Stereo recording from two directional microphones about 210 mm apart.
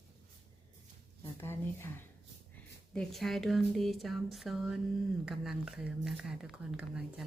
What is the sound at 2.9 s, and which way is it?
A woman's voice, 5° left (ahead or behind).